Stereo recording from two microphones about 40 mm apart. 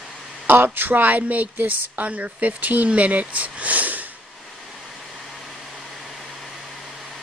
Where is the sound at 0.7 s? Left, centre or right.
Right.